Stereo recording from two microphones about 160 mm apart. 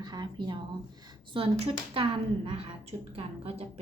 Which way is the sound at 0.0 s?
25° right (ahead or behind).